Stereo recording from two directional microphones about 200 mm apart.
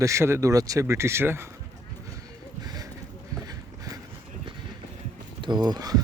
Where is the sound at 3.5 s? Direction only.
20° right (ahead or behind).